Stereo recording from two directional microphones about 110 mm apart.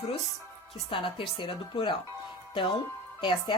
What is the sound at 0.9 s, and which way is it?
A woman's voice, 50° left (ahead or behind).